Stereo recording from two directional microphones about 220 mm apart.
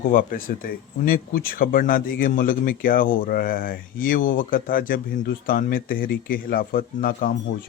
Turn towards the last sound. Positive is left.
turn(degrees=40)  # may be behind; listen again after turning